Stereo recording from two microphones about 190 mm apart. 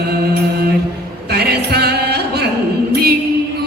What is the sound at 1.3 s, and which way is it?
Music, 60° right (ahead or behind).